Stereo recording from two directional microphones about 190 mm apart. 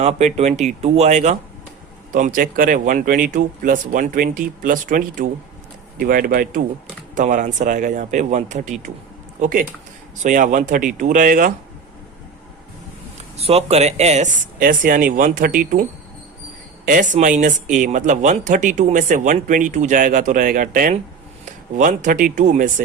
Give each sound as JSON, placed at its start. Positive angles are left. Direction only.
{"t": 0.0, "sound": "speech", "side_deg": -35}
{"t": 13.3, "sound": "speech", "side_deg": -30}